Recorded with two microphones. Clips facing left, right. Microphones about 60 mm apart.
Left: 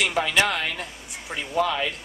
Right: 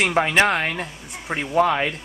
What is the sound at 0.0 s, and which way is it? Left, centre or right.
Speech, right.